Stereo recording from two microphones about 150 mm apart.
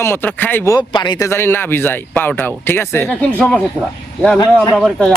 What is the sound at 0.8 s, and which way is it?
Speech, 30° left (ahead or behind).